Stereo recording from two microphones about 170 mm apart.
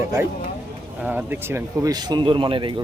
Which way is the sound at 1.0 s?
10° right (ahead or behind).